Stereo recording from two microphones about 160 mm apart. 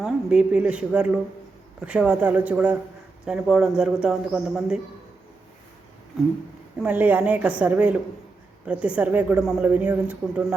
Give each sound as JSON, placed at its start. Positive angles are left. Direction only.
{"t": 0.0, "sound": "a woman's voice", "side_deg": -5}
{"t": 6.8, "sound": "a woman's voice", "side_deg": -10}